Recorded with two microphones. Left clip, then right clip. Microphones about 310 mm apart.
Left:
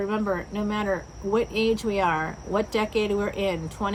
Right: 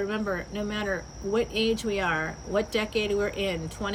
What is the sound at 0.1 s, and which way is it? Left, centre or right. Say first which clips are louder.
Speech: left 3 dB; centre.